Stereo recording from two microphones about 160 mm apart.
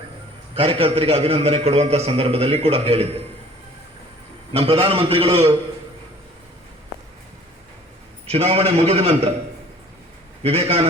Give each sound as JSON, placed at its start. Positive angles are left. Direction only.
{"t": 0.5, "sound": "a man's voice", "side_deg": -35}
{"t": 4.5, "sound": "a man's voice", "side_deg": -40}
{"t": 8.3, "sound": "a man's voice", "side_deg": -40}
{"t": 10.4, "sound": "a man's voice", "side_deg": -40}